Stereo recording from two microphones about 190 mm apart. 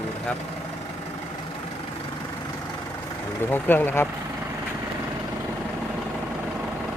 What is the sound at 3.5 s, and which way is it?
Speech, 10° left (ahead or behind).